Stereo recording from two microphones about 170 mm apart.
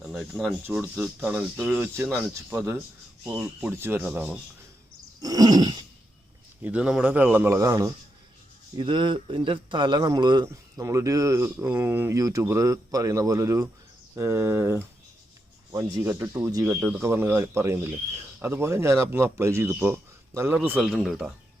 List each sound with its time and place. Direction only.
0.0 s speech: centre (ahead or behind)
0.7 s a man's voice: 15° right (ahead or behind)
5.2 s throat clearing: 20° right (ahead or behind)
6.6 s a man's voice: 10° right (ahead or behind)
8.8 s a man's voice: 30° right (ahead or behind); by 21.3 s 5° right (ahead or behind)